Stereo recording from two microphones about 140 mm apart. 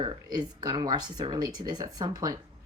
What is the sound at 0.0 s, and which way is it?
Speech, 30° right (ahead or behind).